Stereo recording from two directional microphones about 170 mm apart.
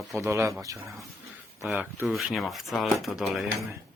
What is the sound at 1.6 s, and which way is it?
Speech, 10° right (ahead or behind).